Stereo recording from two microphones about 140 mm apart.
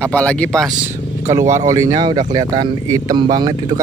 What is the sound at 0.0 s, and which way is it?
Speech, 10° left (ahead or behind).